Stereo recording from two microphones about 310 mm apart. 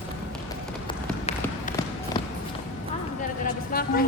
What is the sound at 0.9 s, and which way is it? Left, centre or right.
Trickle, left.